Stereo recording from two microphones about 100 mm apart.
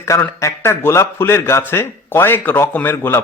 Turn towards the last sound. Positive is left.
turn(degrees=20)  # may be behind; listen again after turning